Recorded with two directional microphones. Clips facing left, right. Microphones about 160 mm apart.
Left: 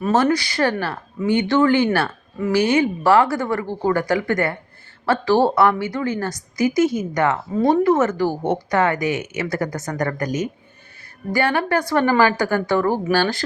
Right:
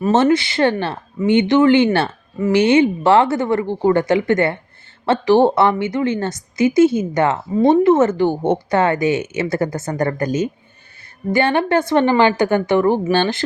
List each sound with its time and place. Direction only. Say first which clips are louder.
0.1 s speech: right 3 dB; 25° right (ahead or behind)